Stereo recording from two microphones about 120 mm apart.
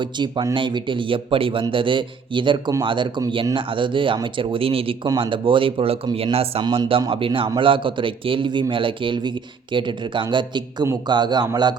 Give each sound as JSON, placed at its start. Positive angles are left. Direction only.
{"t": 0.0, "sound": "speech", "side_deg": -40}